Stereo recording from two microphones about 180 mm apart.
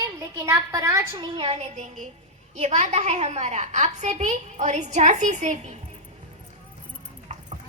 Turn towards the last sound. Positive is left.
turn(degrees=-40)  # may be behind; listen again after turning